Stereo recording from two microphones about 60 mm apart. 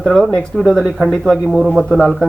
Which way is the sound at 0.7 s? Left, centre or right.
Centre.